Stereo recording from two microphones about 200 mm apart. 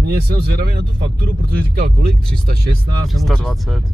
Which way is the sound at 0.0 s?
50° right (ahead or behind).